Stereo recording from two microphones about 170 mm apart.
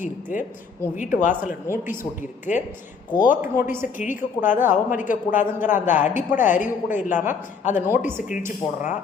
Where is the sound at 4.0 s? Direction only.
50° left (ahead or behind).